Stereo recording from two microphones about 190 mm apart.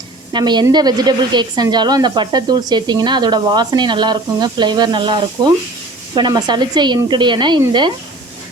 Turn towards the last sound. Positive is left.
turn(degrees=-25)  # may be behind; listen again after turning